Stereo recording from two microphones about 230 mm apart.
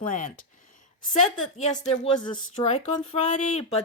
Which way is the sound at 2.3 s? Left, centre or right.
Centre.